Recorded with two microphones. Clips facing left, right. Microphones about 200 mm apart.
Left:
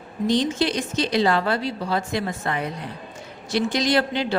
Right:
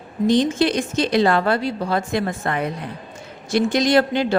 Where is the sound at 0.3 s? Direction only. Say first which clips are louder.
Right 4 dB; 50° right (ahead or behind).